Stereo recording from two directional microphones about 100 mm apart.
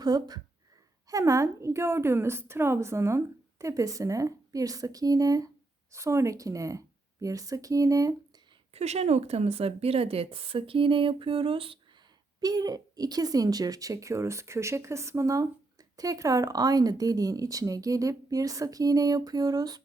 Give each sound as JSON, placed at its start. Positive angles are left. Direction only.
{"t": 0.0, "sound": "a woman's voice", "side_deg": -40}
{"t": 8.7, "sound": "a woman's voice", "side_deg": -90}
{"t": 12.4, "sound": "a woman's voice", "side_deg": -40}